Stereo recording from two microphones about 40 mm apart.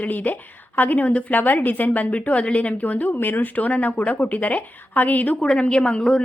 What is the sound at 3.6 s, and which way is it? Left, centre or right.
A woman's voice, left.